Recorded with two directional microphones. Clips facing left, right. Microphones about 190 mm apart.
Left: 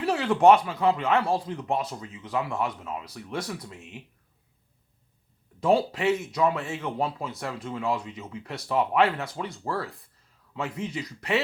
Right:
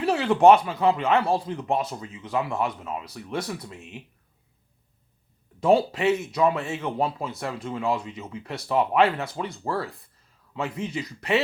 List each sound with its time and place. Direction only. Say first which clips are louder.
0.0 s speech: right 2 dB; 25° right (ahead or behind)
5.5 s speech: right 3 dB; 25° right (ahead or behind)